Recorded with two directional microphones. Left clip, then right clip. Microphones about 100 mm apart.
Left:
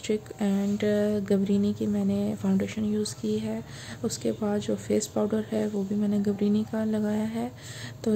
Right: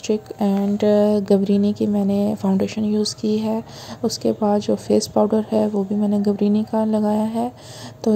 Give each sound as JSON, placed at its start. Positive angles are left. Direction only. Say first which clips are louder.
{"t": 0.4, "sound": "speech", "louder": "right 8 dB", "side_deg": -40}
{"t": 4.5, "sound": "speech", "louder": "right 10 dB", "side_deg": -30}